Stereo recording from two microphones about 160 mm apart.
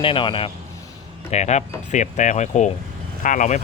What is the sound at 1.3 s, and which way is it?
Speech, 45° left (ahead or behind).